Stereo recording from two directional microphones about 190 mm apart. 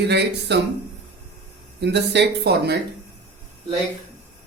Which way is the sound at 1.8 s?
65° right (ahead or behind).